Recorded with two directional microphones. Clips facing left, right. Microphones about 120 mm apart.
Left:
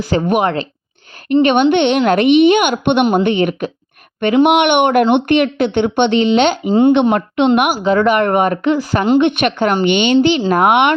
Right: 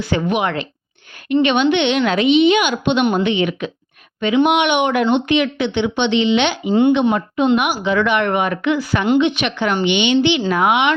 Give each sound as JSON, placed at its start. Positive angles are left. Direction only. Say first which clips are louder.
{"t": 0.1, "sound": "speech", "louder": "left 4 dB", "side_deg": 40}
{"t": 4.2, "sound": "speech", "louder": "left 4 dB", "side_deg": 60}
{"t": 7.3, "sound": "a woman's voice", "louder": "left 3 dB", "side_deg": 75}
{"t": 7.6, "sound": "speech", "louder": "left 4 dB", "side_deg": 45}
{"t": 9.2, "sound": "speech", "louder": "left 4 dB", "side_deg": 55}